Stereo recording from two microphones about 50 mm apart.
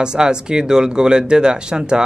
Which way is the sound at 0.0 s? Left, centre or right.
Centre.